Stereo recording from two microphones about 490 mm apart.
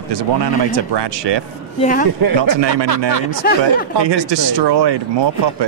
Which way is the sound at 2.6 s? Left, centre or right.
Right.